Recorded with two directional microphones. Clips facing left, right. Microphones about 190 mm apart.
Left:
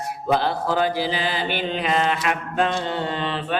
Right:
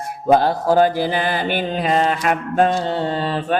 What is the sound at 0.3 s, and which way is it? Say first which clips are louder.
Mantra: right 7 dB; 45° right (ahead or behind).